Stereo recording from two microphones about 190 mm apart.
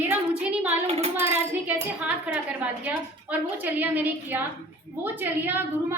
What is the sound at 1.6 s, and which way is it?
Music, 10° right (ahead or behind).